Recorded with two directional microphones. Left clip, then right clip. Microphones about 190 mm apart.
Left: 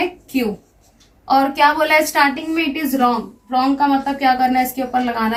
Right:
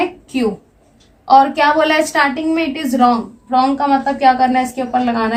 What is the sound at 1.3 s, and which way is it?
A woman's voice, 45° right (ahead or behind).